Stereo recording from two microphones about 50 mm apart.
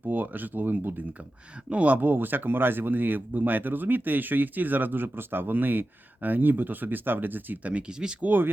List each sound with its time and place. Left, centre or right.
0.0 s speech: right
1.7 s speech: right
7.7 s speech: centre